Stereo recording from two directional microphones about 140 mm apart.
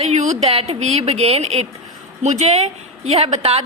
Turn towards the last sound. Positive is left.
turn(degrees=-50)  # may be behind; listen again after turning